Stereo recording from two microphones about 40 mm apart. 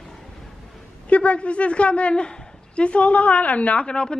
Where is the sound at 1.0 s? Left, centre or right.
Left.